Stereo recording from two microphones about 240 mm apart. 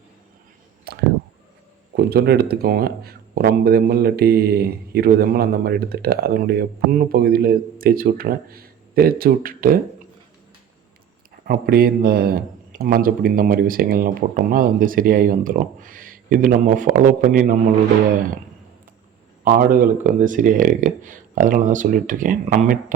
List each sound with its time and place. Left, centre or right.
0.9 s clicking: right
2.0 s speech: right
11.4 s speech: right
19.5 s speech: right